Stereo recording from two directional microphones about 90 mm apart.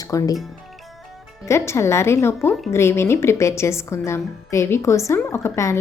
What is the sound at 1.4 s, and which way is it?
A woman's voice, 30° left (ahead or behind).